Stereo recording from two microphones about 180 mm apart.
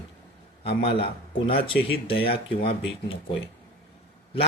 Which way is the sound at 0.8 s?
30° left (ahead or behind).